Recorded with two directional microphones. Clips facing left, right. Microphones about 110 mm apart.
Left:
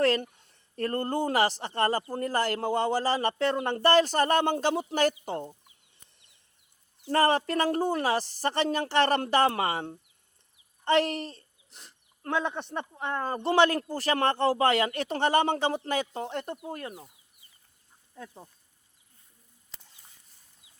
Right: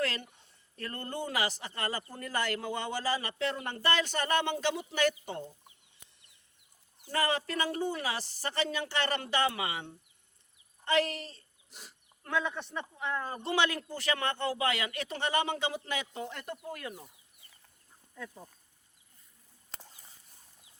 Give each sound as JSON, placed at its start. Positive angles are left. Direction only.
{"t": 0.0, "sound": "a man's voice", "side_deg": 40}
{"t": 7.1, "sound": "a man's voice", "side_deg": 40}
{"t": 11.7, "sound": "speech", "side_deg": -5}
{"t": 12.3, "sound": "speech", "side_deg": 30}
{"t": 12.7, "sound": "a man's voice", "side_deg": 50}